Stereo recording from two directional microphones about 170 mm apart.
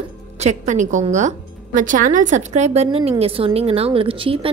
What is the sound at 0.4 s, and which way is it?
A woman's voice, 45° right (ahead or behind).